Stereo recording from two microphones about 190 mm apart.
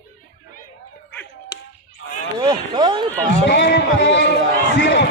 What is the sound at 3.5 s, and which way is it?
Speech, 65° left (ahead or behind).